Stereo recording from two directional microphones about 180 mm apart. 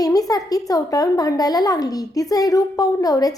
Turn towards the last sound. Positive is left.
turn(degrees=20)  # may be behind; listen again after turning